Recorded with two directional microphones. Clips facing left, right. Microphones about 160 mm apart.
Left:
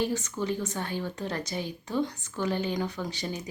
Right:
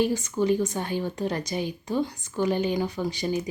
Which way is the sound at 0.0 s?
10° right (ahead or behind).